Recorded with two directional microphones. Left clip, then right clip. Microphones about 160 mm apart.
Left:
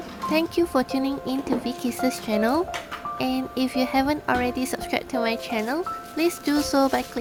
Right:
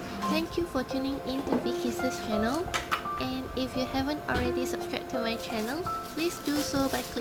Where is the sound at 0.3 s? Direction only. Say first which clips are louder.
Left 12 dB; 50° left (ahead or behind).